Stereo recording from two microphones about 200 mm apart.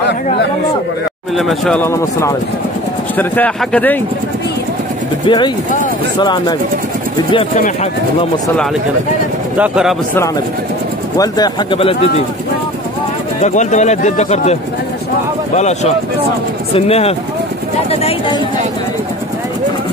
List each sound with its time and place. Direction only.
1.3 s speech: centre (ahead or behind)
5.2 s speech: 20° left (ahead or behind)
7.5 s speech: 35° left (ahead or behind)
9.6 s speech: 5° right (ahead or behind)
11.1 s speech: 20° left (ahead or behind)
13.4 s speech: 35° left (ahead or behind)